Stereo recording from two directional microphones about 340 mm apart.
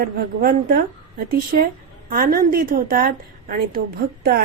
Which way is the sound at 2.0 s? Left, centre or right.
Right.